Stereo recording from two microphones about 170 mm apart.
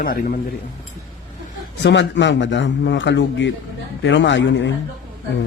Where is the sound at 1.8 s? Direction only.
90° left.